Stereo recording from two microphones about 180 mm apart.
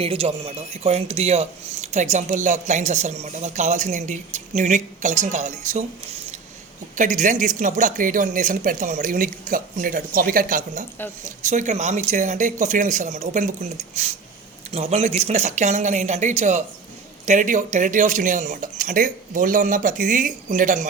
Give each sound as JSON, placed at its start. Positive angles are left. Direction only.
{"t": 0.0, "sound": "speech", "side_deg": -30}
{"t": 6.9, "sound": "speech", "side_deg": -45}